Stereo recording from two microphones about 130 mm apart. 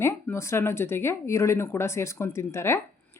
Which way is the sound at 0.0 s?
20° left (ahead or behind).